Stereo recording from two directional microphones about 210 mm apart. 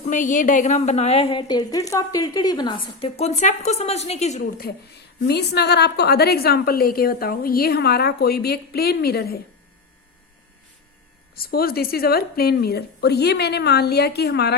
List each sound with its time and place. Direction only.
0.0 s a woman's voice: 35° left (ahead or behind)
5.2 s a woman's voice: 50° left (ahead or behind)
11.3 s a woman's voice: 45° left (ahead or behind)